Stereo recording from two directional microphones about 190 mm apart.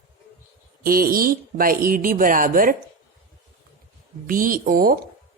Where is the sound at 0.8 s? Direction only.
50° right (ahead or behind).